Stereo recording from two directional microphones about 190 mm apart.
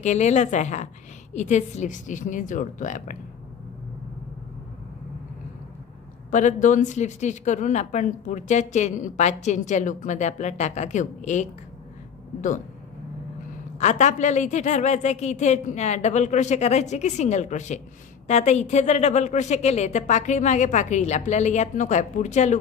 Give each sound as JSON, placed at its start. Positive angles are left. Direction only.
{"t": 0.0, "sound": "speech", "side_deg": 40}
{"t": 6.3, "sound": "speech", "side_deg": 40}
{"t": 13.7, "sound": "speech", "side_deg": 35}